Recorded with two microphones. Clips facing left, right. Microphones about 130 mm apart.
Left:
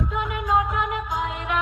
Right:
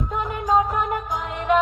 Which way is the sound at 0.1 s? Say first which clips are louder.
Right 4 dB; 40° right (ahead or behind).